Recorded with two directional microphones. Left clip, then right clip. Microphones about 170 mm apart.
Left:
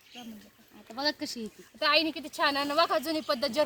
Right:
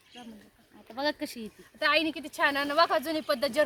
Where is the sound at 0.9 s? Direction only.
15° right (ahead or behind).